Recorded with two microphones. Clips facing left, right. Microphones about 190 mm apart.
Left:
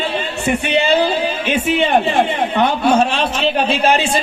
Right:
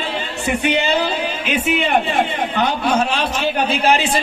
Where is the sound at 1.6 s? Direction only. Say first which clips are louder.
Left 3 dB; 30° left (ahead or behind).